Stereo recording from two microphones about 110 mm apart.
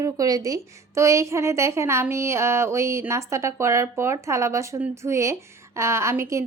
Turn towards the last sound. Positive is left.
turn(degrees=-25)  # may be behind; listen again after turning